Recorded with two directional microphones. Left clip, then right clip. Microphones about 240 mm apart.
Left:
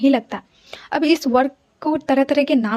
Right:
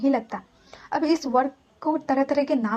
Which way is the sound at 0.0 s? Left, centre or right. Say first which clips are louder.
Left 6 dB; left.